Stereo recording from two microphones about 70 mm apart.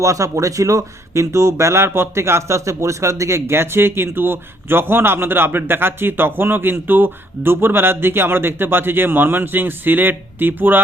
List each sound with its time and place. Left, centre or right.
0.0 s speech: right